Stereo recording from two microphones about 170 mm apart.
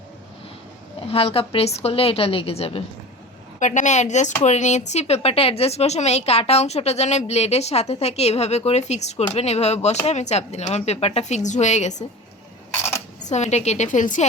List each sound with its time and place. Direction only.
1.0 s a woman's voice: 35° left (ahead or behind)
13.1 s a woman's voice: 45° left (ahead or behind)